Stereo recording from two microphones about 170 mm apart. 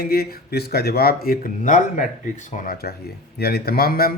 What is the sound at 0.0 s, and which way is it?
A man's voice, 60° left (ahead or behind).